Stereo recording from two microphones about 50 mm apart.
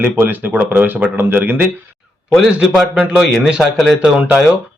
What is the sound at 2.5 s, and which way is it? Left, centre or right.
Speech, right.